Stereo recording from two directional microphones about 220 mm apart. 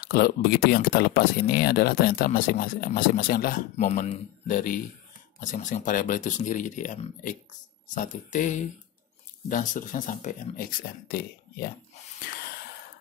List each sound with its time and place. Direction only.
0.0 s speech: 45° left (ahead or behind)
12.3 s gasp: 45° left (ahead or behind)